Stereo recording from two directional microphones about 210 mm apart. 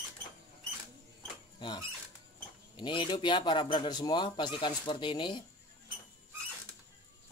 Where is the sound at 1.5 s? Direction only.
20° left (ahead or behind).